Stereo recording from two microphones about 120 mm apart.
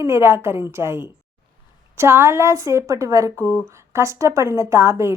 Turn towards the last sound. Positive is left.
turn(degrees=-20)  # may be behind; listen again after turning